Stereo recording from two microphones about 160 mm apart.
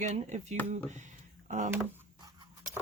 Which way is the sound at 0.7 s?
45° right (ahead or behind).